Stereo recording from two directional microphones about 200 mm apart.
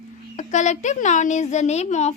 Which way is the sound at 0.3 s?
35° left (ahead or behind).